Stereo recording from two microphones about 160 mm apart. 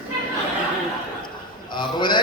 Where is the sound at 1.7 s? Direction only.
30° left (ahead or behind).